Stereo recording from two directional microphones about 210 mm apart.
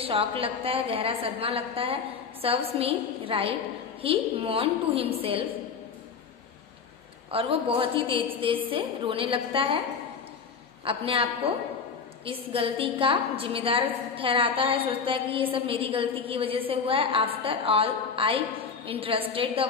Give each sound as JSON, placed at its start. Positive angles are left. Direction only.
{"t": 0.0, "sound": "a woman's voice", "side_deg": -25}
{"t": 7.2, "sound": "a woman's voice", "side_deg": -25}
{"t": 10.8, "sound": "a woman's voice", "side_deg": -25}
{"t": 12.3, "sound": "a woman's voice", "side_deg": -25}